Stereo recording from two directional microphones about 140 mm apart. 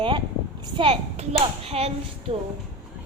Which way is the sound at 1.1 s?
50° right (ahead or behind).